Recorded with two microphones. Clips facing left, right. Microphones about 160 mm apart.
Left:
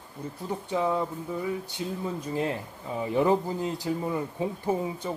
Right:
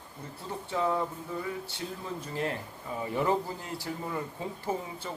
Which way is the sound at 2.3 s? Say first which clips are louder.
Left 3 dB; 20° left (ahead or behind).